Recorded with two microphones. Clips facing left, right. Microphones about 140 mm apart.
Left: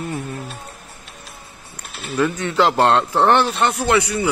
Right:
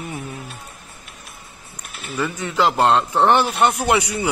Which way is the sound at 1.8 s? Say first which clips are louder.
Left 3 dB; 35° left (ahead or behind).